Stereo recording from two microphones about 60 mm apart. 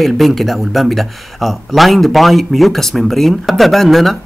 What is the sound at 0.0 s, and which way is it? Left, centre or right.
Speech, centre.